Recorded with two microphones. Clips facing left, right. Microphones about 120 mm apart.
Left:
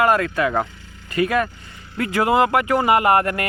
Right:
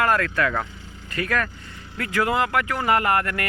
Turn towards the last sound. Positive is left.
turn(degrees=20)  # may be behind; listen again after turning